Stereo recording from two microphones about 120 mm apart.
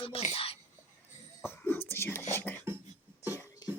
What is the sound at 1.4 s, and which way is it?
Speech, 20° left (ahead or behind).